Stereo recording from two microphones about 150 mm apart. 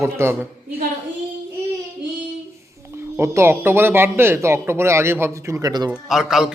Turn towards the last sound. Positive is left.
turn(degrees=-5)  # may be behind; listen again after turning